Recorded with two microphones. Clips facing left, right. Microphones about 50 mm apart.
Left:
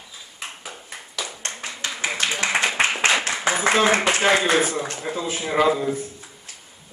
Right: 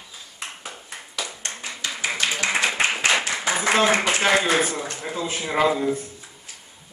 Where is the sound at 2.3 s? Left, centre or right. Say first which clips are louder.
Left 2 dB; left.